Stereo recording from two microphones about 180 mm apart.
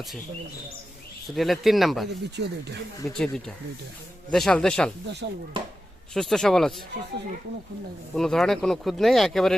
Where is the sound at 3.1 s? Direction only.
5° left (ahead or behind).